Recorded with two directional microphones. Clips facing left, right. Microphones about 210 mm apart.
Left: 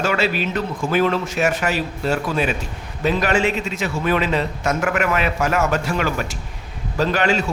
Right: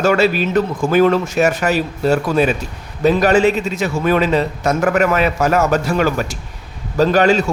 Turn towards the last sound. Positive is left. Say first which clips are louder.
# right 6 dB
turn(degrees=-40)  # may be behind; listen again after turning